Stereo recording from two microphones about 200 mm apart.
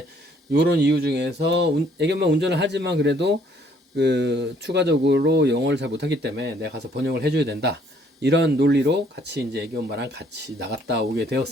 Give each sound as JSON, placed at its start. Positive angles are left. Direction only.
{"t": 0.5, "sound": "speech", "side_deg": -55}